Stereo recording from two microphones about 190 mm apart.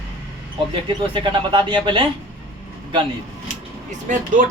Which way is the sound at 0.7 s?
25° right (ahead or behind).